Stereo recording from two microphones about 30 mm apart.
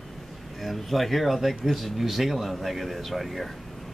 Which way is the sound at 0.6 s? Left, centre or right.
Centre.